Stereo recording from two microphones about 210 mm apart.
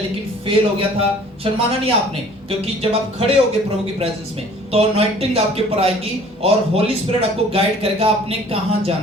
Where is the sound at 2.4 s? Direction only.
25° right (ahead or behind).